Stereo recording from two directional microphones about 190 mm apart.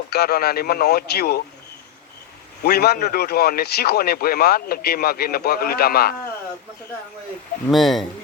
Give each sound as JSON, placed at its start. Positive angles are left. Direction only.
{"t": 0.1, "sound": "speech", "side_deg": 55}
{"t": 2.6, "sound": "speech", "side_deg": 60}
{"t": 7.7, "sound": "speech", "side_deg": 0}